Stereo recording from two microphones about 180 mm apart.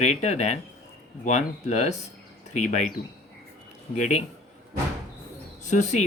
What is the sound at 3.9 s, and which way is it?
Speech, 40° left (ahead or behind).